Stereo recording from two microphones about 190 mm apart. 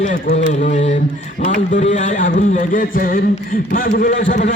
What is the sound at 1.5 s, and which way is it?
A man's voice, 40° left (ahead or behind).